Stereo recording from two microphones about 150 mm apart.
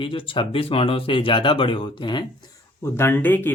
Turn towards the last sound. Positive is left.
turn(degrees=10)  # may be behind; listen again after turning